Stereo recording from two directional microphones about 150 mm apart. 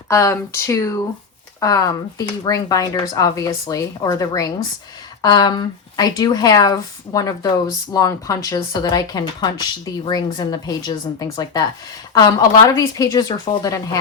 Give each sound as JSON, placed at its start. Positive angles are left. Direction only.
{"t": 0.1, "sound": "speech", "side_deg": 20}